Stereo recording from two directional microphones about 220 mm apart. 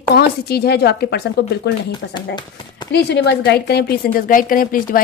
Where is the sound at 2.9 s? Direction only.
50° left (ahead or behind).